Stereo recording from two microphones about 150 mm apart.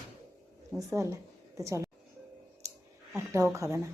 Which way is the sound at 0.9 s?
20° right (ahead or behind).